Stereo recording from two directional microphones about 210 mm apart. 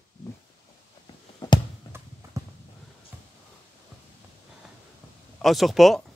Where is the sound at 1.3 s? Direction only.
20° left (ahead or behind).